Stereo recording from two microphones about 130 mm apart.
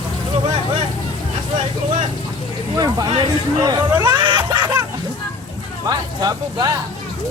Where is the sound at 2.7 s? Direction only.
30° right (ahead or behind).